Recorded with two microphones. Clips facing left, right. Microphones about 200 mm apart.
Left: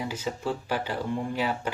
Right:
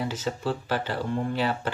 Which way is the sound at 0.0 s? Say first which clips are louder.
Right 2 dB; 10° left (ahead or behind).